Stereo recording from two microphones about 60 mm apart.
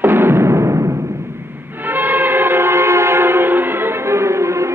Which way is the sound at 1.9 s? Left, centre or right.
Right.